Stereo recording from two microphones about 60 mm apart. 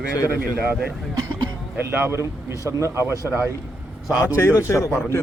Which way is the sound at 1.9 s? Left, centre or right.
Right.